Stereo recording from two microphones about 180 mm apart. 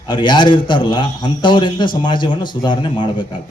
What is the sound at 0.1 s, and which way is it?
A man's voice, 25° left (ahead or behind).